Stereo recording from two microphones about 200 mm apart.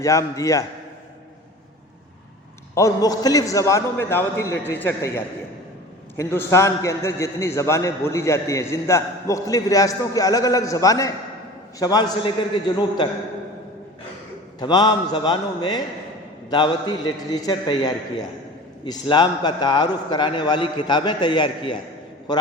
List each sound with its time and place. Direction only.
0.0 s a man's voice: 15° left (ahead or behind)
2.7 s a man's voice: 15° left (ahead or behind)
14.6 s a man's voice: 20° left (ahead or behind)